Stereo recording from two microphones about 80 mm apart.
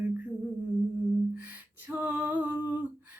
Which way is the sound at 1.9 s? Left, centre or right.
Right.